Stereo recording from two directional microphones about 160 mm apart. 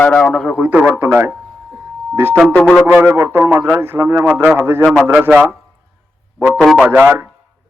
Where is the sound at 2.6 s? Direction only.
5° left (ahead or behind).